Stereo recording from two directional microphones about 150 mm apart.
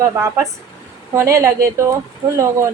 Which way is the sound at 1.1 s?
20° right (ahead or behind).